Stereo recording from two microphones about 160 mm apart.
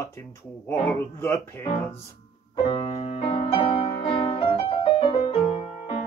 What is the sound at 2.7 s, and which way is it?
Music, 40° left (ahead or behind).